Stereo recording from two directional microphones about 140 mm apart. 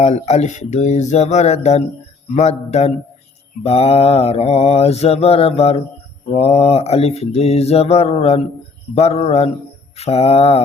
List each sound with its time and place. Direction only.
0.0 s mantra: 50° left (ahead or behind)